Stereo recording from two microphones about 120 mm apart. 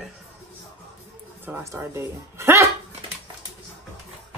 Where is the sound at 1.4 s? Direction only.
20° right (ahead or behind).